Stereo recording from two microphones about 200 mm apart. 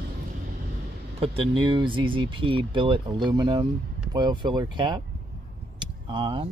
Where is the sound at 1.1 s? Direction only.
30° right (ahead or behind).